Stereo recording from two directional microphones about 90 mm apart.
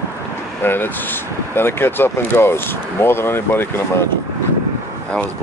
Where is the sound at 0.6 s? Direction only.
25° left (ahead or behind).